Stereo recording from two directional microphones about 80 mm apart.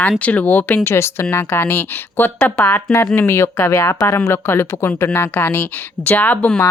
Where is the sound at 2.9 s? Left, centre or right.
Left; by 6.6 s centre.